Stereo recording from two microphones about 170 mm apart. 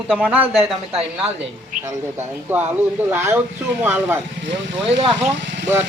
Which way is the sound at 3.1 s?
15° right (ahead or behind).